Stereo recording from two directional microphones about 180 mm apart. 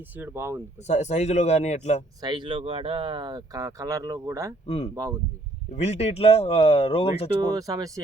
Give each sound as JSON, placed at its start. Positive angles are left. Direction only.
{"t": 0.2, "sound": "speech", "side_deg": -15}
{"t": 0.9, "sound": "speech", "side_deg": 40}
{"t": 2.2, "sound": "speech", "side_deg": -25}
{"t": 4.6, "sound": "speech", "side_deg": 35}
{"t": 4.9, "sound": "speech", "side_deg": -15}
{"t": 5.7, "sound": "speech", "side_deg": 35}
{"t": 7.4, "sound": "speech", "side_deg": -20}